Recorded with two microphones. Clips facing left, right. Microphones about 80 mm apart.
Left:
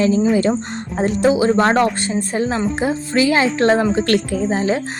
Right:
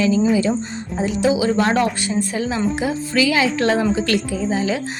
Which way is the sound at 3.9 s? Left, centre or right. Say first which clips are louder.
Left 3 dB; left.